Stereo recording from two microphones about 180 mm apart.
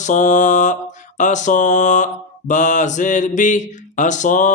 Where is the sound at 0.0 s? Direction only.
45° left (ahead or behind).